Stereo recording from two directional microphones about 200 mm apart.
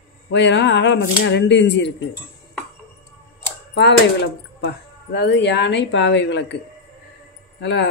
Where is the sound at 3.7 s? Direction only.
55° left (ahead or behind).